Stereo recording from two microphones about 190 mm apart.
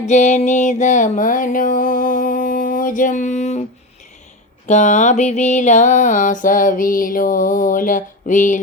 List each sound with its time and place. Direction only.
0.0 s music: 40° left (ahead or behind)
4.7 s music: 40° left (ahead or behind)